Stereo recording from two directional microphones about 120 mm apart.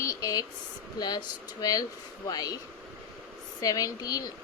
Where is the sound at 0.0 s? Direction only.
30° left (ahead or behind).